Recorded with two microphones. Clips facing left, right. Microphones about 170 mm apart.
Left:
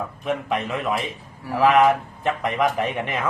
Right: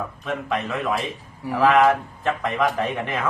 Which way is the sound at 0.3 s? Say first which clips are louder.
Left 2 dB; 15° left (ahead or behind).